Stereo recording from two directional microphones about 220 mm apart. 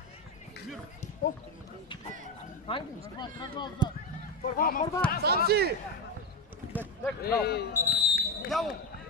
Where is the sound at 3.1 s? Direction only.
20° left (ahead or behind).